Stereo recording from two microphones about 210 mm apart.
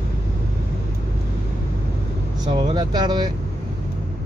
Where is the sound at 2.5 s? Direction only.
20° right (ahead or behind).